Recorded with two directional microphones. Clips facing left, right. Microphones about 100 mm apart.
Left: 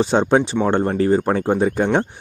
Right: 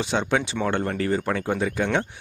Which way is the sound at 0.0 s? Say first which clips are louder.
Left 8 dB; 35° left (ahead or behind).